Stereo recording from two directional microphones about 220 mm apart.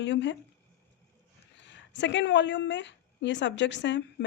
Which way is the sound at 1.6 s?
55° left (ahead or behind).